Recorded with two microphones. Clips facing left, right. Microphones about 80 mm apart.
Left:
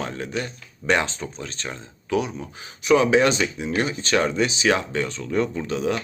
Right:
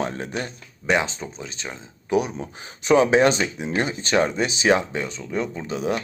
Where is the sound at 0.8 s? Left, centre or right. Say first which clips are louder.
Even; centre.